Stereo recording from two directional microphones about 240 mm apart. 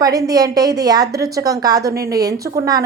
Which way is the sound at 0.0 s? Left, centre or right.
Centre.